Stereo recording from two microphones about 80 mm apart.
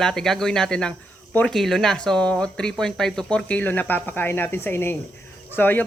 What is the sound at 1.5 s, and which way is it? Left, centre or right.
Speech, centre.